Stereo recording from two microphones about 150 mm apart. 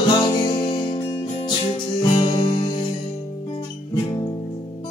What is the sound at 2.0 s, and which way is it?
Music, 30° left (ahead or behind).